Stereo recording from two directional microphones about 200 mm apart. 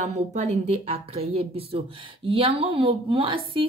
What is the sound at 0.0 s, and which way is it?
A woman's voice, 35° right (ahead or behind).